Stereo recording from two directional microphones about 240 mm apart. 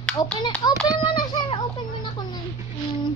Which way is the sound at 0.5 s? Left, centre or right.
Centre.